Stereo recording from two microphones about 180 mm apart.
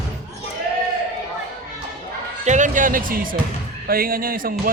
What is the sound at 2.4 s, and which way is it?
Speech, 45° right (ahead or behind).